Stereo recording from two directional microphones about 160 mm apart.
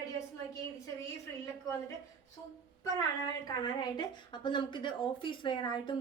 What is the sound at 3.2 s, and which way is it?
A woman's voice, 25° left (ahead or behind).